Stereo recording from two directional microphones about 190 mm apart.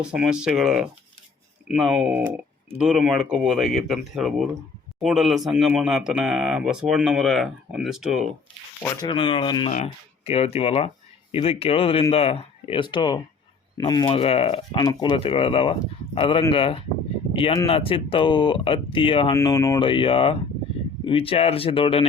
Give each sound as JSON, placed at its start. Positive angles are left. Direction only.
{"t": 0.0, "sound": "speech", "side_deg": -5}
{"t": 9.0, "sound": "speech", "side_deg": 25}
{"t": 19.3, "sound": "speech", "side_deg": 15}